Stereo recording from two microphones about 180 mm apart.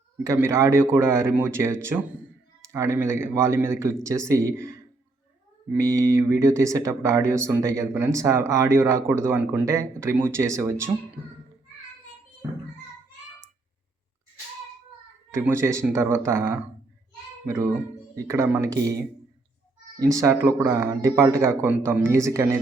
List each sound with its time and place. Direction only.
0.3 s speech: 15° right (ahead or behind)
5.8 s speech: 15° right (ahead or behind)
15.3 s a child's voice: 15° right (ahead or behind)
20.0 s speech: 20° right (ahead or behind)